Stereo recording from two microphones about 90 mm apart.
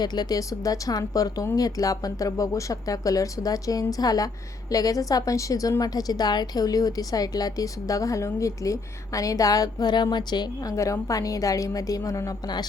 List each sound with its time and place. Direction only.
0.0 s a woman's voice: 50° left (ahead or behind)